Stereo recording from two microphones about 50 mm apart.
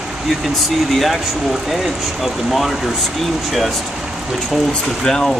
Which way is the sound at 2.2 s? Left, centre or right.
Centre.